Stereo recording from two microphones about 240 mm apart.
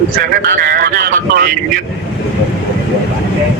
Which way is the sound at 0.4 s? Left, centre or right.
Right.